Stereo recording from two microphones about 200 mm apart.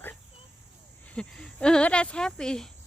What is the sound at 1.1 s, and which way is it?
Speech, 5° left (ahead or behind).